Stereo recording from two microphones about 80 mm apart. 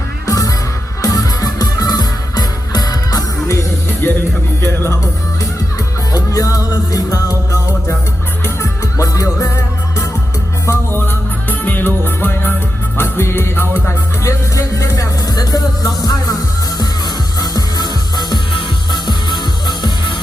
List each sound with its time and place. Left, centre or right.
0.3 s music: left
4.0 s music: left
6.1 s music: left
9.0 s music: left
10.9 s music: left
14.5 s music: left